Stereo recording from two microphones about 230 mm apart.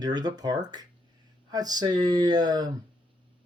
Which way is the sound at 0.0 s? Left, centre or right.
Centre.